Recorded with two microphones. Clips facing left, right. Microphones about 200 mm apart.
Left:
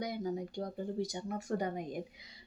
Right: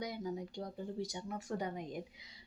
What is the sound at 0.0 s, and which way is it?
Speech, 45° left (ahead or behind).